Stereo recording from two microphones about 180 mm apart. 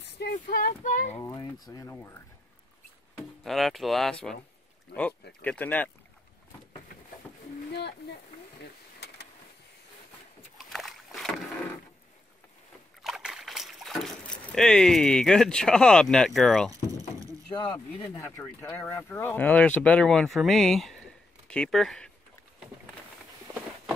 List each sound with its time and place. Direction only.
0.2 s speech: 65° left (ahead or behind)
0.7 s speech: 45° left (ahead or behind)
1.2 s speech: 20° left (ahead or behind)
3.4 s speech: centre (ahead or behind)
4.9 s speech: 60° left (ahead or behind)
5.4 s speech: 10° left (ahead or behind)
10.7 s boat: centre (ahead or behind)
13.0 s slosh: 5° right (ahead or behind)
18.1 s speech: 15° left (ahead or behind)